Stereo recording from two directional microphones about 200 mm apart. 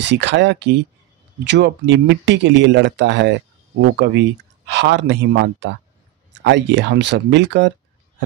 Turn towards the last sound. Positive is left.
turn(degrees=-60)  # may be behind; listen again after turning